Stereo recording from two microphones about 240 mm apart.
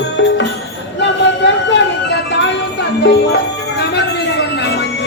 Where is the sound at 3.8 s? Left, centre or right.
Left.